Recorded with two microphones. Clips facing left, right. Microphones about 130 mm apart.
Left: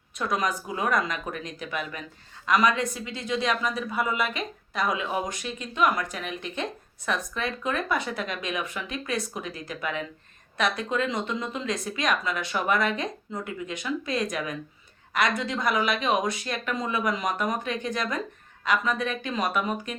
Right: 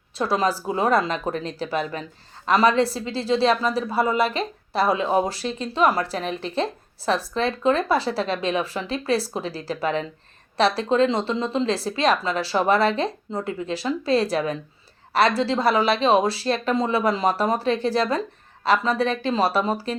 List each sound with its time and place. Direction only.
0.2 s a woman's voice: 30° right (ahead or behind)